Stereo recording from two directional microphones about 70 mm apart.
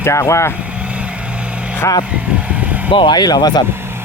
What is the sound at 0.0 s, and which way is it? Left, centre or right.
Speech, left.